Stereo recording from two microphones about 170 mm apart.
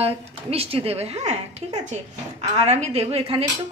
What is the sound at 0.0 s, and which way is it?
Speech, 35° right (ahead or behind).